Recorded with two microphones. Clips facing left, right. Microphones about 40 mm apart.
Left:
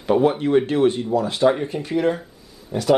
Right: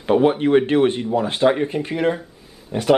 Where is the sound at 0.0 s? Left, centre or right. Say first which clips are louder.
Right 1 dB; right.